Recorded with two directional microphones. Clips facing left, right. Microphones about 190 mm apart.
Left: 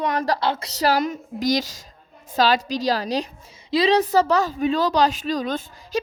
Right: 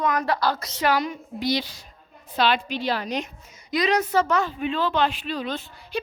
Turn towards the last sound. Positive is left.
turn(degrees=45)  # may be behind; listen again after turning